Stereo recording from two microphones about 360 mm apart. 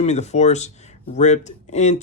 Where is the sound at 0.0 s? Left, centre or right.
Centre.